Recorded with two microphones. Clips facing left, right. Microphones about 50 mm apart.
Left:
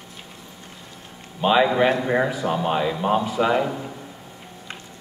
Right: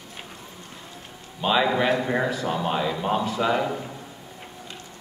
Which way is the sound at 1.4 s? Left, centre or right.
Centre.